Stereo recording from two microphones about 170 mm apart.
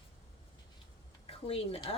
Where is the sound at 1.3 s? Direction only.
35° left (ahead or behind).